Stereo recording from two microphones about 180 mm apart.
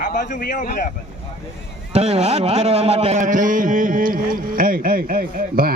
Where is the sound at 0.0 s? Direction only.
45° left (ahead or behind).